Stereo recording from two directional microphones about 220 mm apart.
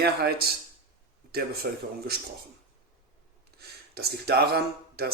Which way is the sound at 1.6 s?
45° right (ahead or behind).